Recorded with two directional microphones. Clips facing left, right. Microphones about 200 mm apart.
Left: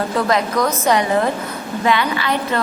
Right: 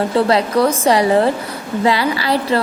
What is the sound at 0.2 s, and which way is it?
A woman's voice, 30° right (ahead or behind).